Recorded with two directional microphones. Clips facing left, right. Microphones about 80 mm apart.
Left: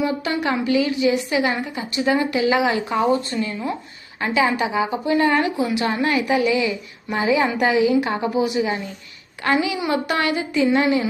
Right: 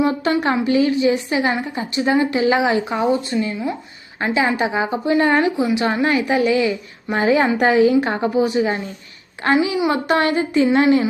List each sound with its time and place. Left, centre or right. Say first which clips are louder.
0.0 s a woman's voice: right 4 dB; right